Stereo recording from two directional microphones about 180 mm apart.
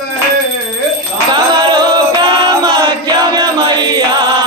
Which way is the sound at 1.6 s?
25° right (ahead or behind).